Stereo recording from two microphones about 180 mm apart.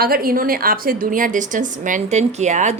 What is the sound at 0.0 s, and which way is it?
A woman's voice, 55° right (ahead or behind).